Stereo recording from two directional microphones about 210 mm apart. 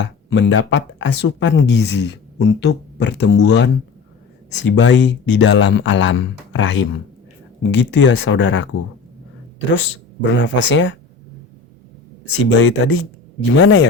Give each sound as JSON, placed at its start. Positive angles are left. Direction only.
{"t": 0.0, "sound": "speech", "side_deg": 55}
{"t": 12.5, "sound": "speech", "side_deg": 60}